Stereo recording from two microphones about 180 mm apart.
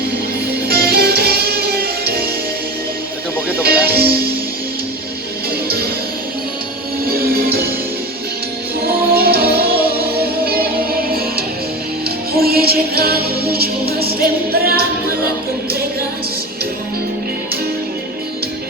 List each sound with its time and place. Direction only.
0.7 s music: 60° right (ahead or behind)
3.6 s music: 60° right (ahead or behind)
5.6 s music: 60° right (ahead or behind)
7.0 s music: 55° right (ahead or behind)
9.1 s music: 60° right (ahead or behind)
12.0 s music: 60° right (ahead or behind)